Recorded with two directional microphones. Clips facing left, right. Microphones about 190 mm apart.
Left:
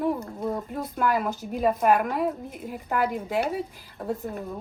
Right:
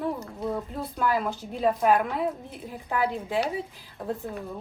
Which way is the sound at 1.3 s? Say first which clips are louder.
Left 3 dB; 15° left (ahead or behind).